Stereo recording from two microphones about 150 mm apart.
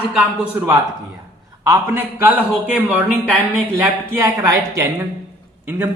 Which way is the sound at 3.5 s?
15° right (ahead or behind).